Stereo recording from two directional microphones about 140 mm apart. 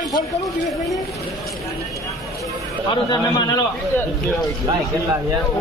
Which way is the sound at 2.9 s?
30° left (ahead or behind).